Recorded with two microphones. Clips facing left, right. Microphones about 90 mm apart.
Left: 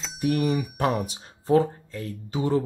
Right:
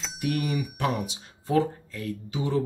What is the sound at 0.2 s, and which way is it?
Speech, 35° left (ahead or behind).